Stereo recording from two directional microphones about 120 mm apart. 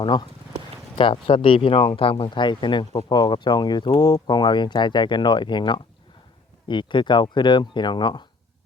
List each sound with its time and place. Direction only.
0.0 s speech: 40° left (ahead or behind)